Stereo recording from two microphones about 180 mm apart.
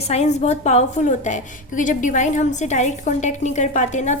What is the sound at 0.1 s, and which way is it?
A woman's voice, 40° left (ahead or behind).